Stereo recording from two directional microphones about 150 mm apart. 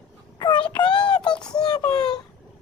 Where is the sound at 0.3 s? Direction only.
30° left (ahead or behind).